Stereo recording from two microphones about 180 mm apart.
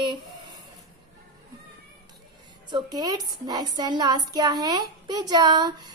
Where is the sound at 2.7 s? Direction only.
20° right (ahead or behind).